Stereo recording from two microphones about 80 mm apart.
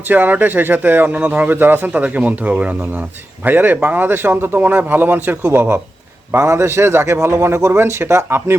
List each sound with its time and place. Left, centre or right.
0.1 s a man's voice: right